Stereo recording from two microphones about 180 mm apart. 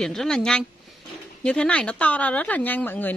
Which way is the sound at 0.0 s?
Centre (ahead or behind).